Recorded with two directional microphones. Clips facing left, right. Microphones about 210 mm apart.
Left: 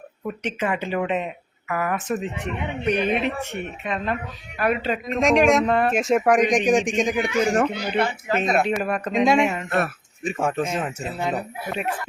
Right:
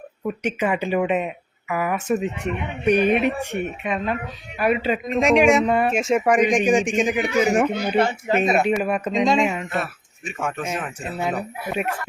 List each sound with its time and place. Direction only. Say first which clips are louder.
0.4 s speech: right 3 dB; 10° right (ahead or behind)
7.7 s speech: right 3 dB; 45° right (ahead or behind)
8.3 s speech: right 1 dB; 10° right (ahead or behind)
9.1 s speech: left 1 dB; 10° left (ahead or behind)
9.6 s speech: left 3 dB; 55° left (ahead or behind)
10.2 s speech: left 4 dB; 35° left (ahead or behind)